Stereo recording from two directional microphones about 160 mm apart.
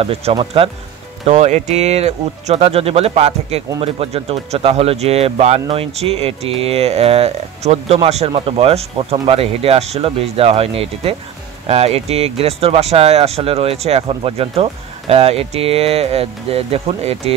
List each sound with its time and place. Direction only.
0.0 s speech: 35° right (ahead or behind)